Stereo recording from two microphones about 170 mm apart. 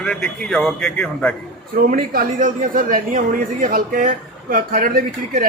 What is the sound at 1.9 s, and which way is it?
Speech, 55° right (ahead or behind).